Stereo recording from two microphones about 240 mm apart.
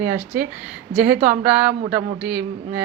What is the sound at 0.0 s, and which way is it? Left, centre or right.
A woman's voice, centre.